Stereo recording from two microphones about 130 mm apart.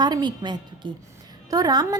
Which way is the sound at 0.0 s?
35° right (ahead or behind).